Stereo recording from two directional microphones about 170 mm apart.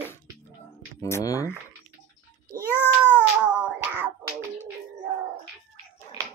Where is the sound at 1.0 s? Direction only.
20° left (ahead or behind).